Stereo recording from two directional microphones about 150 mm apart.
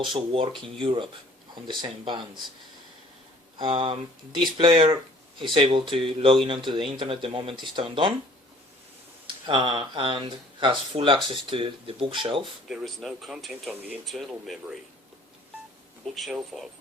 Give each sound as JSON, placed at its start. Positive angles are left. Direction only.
{"t": 0.0, "sound": "speech", "side_deg": -35}
{"t": 3.6, "sound": "speech", "side_deg": -35}
{"t": 9.2, "sound": "speech", "side_deg": -35}
{"t": 12.6, "sound": "speech", "side_deg": 0}
{"t": 16.1, "sound": "speech", "side_deg": 0}